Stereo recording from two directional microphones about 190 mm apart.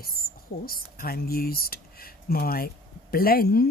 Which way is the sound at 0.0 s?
50° left (ahead or behind).